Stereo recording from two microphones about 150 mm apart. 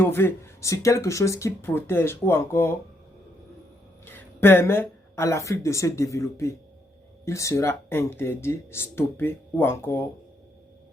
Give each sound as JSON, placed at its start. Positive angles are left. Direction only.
{"t": 0.0, "sound": "speech", "side_deg": 15}
{"t": 4.0, "sound": "a woman's voice", "side_deg": 15}